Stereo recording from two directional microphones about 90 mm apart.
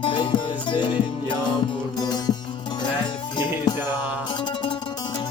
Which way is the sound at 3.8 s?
20° right (ahead or behind).